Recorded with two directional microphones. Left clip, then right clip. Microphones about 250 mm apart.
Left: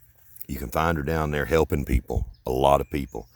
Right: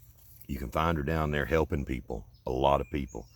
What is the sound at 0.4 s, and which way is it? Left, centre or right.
Speech, left.